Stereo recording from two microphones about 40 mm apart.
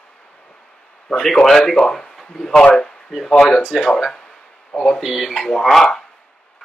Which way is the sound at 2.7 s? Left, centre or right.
Centre.